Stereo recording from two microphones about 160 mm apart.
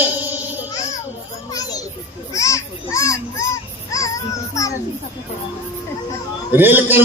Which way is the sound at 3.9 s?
20° left (ahead or behind).